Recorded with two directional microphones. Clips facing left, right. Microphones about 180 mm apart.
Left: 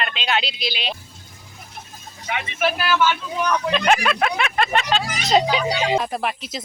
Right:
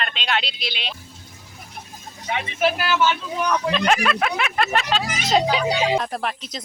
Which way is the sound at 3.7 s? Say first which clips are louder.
Left 2 dB; centre (ahead or behind).